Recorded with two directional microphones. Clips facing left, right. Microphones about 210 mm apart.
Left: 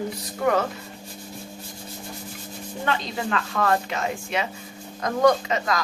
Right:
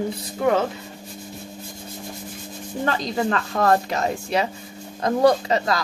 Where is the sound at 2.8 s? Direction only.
40° right (ahead or behind).